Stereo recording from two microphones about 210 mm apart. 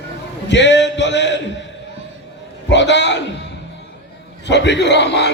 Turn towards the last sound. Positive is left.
turn(degrees=55)  # may be behind; listen again after turning